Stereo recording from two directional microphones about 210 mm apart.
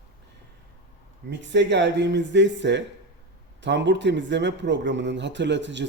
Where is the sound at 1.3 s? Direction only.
55° right (ahead or behind).